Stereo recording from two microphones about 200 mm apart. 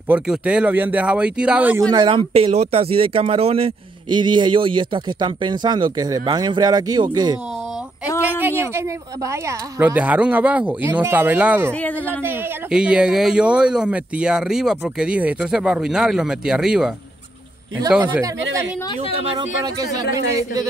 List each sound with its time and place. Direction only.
0.1 s speech: 5° right (ahead or behind)
1.9 s speech: 25° right (ahead or behind)
8.2 s speech: 10° right (ahead or behind)
19.2 s speech: 20° right (ahead or behind)